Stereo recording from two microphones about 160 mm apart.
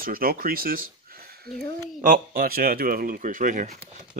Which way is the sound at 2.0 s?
60° right (ahead or behind).